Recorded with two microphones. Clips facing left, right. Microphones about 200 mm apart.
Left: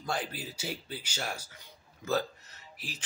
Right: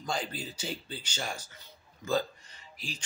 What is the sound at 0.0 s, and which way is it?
Speech, 5° left (ahead or behind).